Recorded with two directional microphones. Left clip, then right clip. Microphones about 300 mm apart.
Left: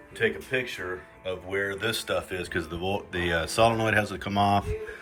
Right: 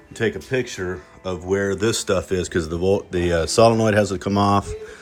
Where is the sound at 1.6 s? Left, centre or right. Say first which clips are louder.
Right 7 dB; centre.